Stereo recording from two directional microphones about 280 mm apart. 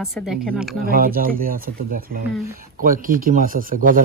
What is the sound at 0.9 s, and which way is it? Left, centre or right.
A man's voice, right.